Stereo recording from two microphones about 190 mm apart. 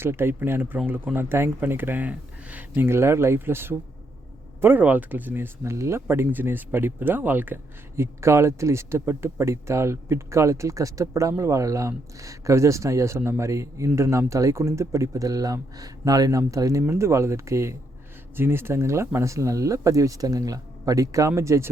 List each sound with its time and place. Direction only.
0.0 s speech: 10° right (ahead or behind)